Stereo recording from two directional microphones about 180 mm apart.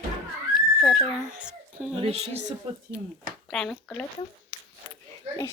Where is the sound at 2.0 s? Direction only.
35° right (ahead or behind).